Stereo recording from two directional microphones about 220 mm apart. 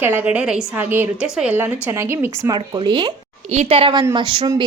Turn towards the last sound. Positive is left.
turn(degrees=-20)  # may be behind; listen again after turning